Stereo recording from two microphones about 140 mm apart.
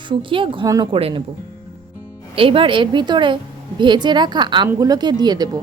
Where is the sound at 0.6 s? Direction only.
25° right (ahead or behind).